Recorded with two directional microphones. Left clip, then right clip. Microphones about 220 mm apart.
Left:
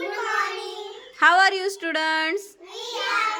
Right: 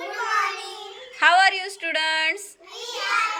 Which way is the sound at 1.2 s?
20° left (ahead or behind).